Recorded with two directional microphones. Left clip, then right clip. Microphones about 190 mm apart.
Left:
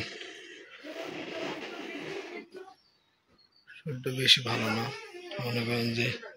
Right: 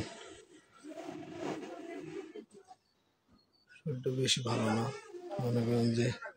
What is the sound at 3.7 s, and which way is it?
Speech, 10° right (ahead or behind).